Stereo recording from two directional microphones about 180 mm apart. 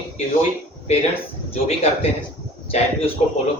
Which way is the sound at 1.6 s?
35° left (ahead or behind).